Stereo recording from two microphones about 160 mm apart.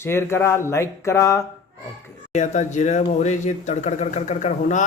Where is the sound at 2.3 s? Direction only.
50° left (ahead or behind).